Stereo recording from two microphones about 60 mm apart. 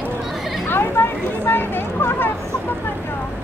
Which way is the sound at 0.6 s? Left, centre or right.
Left.